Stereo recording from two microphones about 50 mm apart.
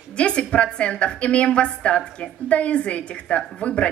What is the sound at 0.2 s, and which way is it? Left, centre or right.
Speech, left.